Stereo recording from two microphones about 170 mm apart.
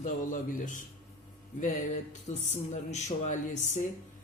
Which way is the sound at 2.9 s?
45° left (ahead or behind).